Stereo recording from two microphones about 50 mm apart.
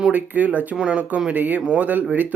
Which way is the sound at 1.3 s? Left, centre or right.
Right.